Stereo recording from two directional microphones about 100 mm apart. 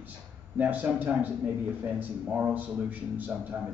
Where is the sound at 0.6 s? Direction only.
15° right (ahead or behind).